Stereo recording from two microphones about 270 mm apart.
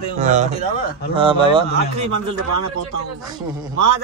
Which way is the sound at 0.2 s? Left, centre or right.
Right.